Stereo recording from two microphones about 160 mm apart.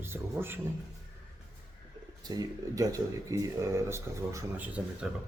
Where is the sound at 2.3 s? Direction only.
25° right (ahead or behind).